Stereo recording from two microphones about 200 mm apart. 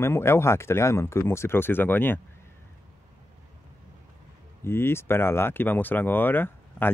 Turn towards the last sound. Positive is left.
turn(degrees=10)  # may be behind; listen again after turning